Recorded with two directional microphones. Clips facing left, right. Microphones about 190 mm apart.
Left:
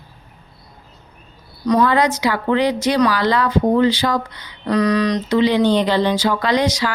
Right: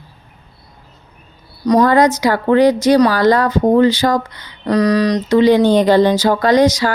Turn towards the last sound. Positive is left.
turn(degrees=-45)  # may be behind; listen again after turning